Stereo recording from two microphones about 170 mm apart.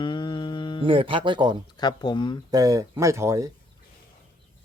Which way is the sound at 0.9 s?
30° right (ahead or behind).